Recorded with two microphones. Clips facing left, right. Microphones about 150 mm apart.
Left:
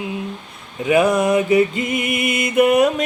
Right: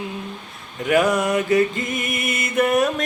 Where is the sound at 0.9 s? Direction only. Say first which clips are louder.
Left 3 dB; 15° left (ahead or behind).